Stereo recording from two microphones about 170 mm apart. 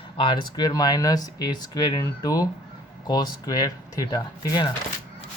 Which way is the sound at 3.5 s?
20° left (ahead or behind).